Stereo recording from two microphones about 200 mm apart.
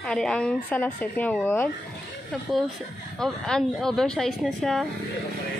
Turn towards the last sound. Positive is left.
turn(degrees=0)  # may be behind; listen again after turning